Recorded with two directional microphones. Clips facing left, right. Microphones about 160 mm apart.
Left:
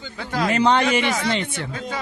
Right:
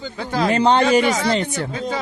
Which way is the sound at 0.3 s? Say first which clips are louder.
Right 2 dB; 30° right (ahead or behind).